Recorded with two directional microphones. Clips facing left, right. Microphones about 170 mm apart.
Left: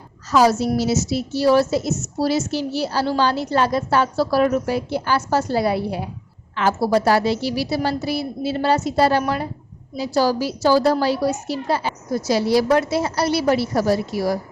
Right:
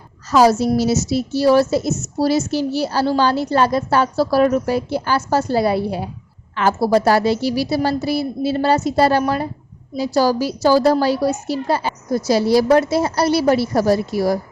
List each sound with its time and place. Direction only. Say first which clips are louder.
0.3 s a woman's voice: right 3 dB; 40° right (ahead or behind)